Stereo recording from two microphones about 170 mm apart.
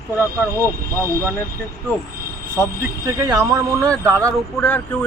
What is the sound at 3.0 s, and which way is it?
Speech, 20° right (ahead or behind).